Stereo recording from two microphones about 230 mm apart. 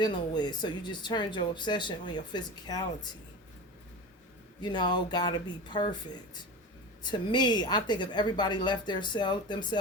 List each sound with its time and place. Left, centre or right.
0.0 s speech: centre
4.6 s speech: centre
7.0 s speech: centre